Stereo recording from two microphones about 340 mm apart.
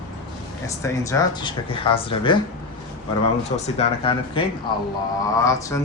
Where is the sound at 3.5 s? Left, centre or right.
Centre.